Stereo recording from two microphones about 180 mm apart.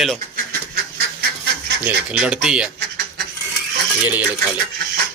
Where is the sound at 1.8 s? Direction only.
5° right (ahead or behind).